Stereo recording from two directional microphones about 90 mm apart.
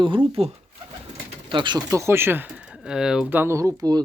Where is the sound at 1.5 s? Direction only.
60° right (ahead or behind).